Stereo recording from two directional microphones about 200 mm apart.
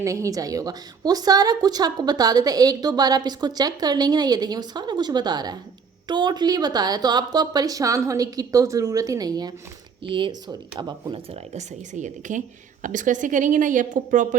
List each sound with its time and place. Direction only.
0.0 s a woman's voice: 15° right (ahead or behind)
11.5 s speech: 35° right (ahead or behind)